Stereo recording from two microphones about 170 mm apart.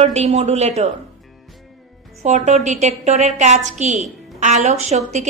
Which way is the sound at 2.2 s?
45° right (ahead or behind).